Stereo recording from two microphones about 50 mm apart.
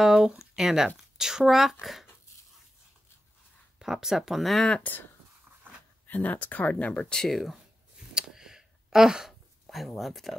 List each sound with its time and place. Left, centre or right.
0.0 s speech: centre
3.8 s speech: centre
4.9 s speech: left
5.7 s a sound: right
6.0 s speech: left
7.2 s speech: centre
8.1 s a sound: centre
9.9 s speech: centre